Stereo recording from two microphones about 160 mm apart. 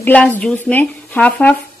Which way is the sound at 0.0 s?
10° left (ahead or behind).